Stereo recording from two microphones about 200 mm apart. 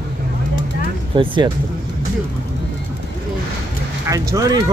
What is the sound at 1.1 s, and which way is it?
Speech, 25° right (ahead or behind).